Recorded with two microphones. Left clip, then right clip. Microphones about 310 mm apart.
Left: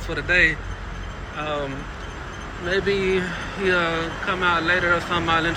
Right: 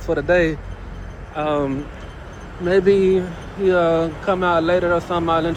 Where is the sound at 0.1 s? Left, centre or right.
Centre.